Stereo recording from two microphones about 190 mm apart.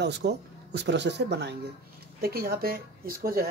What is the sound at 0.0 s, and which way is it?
Speech, 60° right (ahead or behind).